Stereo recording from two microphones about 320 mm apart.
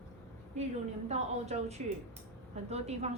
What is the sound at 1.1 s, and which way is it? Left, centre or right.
A woman's voice, centre.